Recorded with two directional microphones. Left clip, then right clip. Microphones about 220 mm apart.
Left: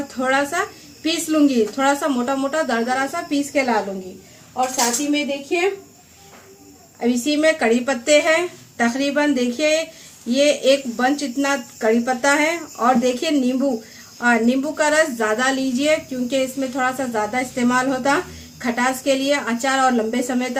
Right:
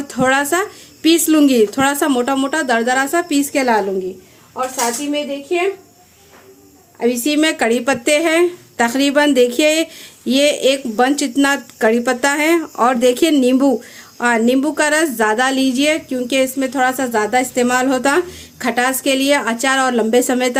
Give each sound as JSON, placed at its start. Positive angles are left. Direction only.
{"t": 0.1, "sound": "a woman's voice", "side_deg": -50}
{"t": 7.0, "sound": "a woman's voice", "side_deg": -45}